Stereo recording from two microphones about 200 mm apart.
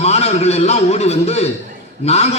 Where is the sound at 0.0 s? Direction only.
30° left (ahead or behind).